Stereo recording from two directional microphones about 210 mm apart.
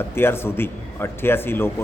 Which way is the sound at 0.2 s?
10° left (ahead or behind).